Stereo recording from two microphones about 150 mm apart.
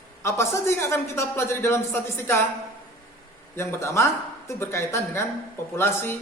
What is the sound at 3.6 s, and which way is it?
Speech, 15° left (ahead or behind).